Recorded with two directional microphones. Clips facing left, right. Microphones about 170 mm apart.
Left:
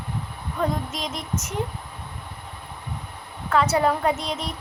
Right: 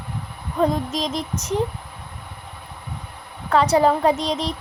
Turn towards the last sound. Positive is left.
turn(degrees=-30)  # may be behind; listen again after turning